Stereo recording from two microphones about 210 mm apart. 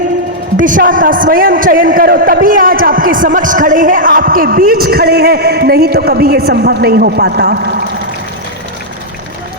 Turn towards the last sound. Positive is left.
turn(degrees=-50)  # may be behind; listen again after turning